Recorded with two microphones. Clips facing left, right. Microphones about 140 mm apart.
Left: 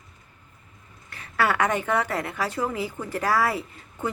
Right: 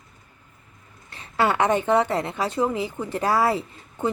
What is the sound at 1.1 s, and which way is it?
A woman's voice, 25° right (ahead or behind).